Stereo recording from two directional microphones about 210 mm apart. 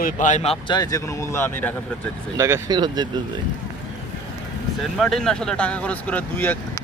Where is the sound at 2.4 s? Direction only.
10° right (ahead or behind).